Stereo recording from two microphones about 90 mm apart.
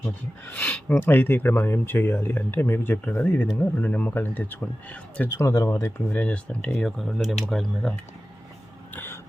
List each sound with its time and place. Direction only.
0.0 s speech: 20° left (ahead or behind)
5.4 s speech: 35° left (ahead or behind)
6.1 s speech: 15° left (ahead or behind)
8.9 s throat clearing: 25° left (ahead or behind)